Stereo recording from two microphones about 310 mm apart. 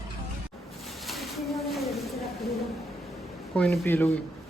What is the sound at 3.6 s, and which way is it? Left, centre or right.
Speech, centre.